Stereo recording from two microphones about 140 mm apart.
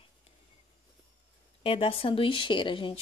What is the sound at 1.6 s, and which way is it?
Speech, 40° left (ahead or behind).